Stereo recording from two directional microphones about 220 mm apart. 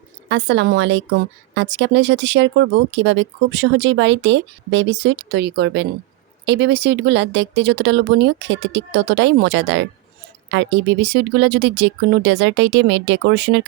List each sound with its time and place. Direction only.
0.3 s speech: 55° right (ahead or behind)